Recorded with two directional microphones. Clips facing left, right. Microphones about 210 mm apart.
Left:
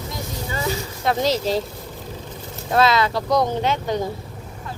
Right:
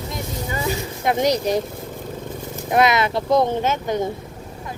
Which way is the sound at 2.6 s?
20° right (ahead or behind).